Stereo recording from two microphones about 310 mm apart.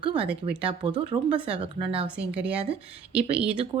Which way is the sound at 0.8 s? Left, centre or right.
Centre.